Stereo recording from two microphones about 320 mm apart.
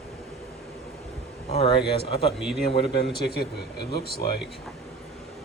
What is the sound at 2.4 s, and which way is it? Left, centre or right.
Speech, centre.